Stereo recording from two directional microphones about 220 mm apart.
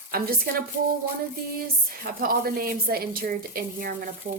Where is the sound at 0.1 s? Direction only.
40° right (ahead or behind).